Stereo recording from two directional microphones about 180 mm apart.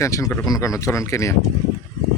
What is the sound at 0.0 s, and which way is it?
Speech, 15° left (ahead or behind).